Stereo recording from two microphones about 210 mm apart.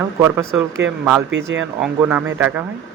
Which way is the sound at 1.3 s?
60° right (ahead or behind).